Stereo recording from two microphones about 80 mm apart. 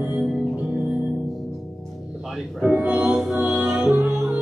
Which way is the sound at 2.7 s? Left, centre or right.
Centre.